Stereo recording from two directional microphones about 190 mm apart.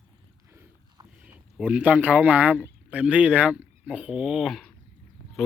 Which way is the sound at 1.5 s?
5° right (ahead or behind).